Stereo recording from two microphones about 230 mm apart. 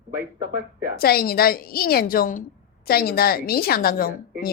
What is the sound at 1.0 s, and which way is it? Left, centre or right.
A woman's voice, left.